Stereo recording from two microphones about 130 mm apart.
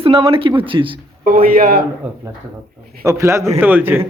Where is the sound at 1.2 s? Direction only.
90° right.